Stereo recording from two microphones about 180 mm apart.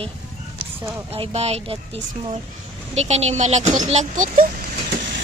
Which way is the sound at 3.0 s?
35° right (ahead or behind).